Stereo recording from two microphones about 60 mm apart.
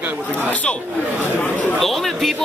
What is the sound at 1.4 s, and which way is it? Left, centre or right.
Speech, left.